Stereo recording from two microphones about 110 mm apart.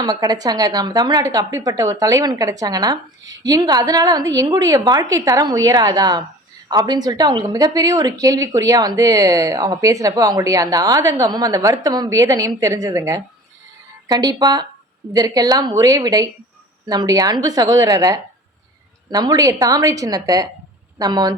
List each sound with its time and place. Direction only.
0.0 s a woman's voice: 35° right (ahead or behind)